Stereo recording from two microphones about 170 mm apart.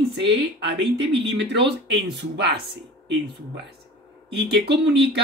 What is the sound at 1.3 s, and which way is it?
Speech, 90° right.